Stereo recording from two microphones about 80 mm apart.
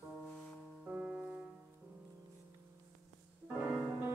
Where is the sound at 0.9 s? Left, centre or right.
Centre.